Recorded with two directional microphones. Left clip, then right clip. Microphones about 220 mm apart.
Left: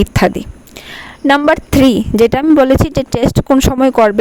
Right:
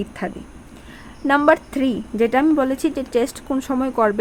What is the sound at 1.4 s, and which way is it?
Speech, 35° left (ahead or behind).